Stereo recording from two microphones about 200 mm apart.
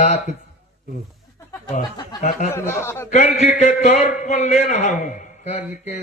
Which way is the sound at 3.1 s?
35° left (ahead or behind).